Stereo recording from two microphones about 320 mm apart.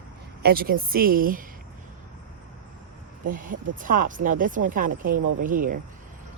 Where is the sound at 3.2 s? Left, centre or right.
Right.